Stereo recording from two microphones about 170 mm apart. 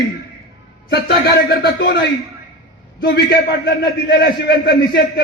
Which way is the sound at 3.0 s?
75° left (ahead or behind).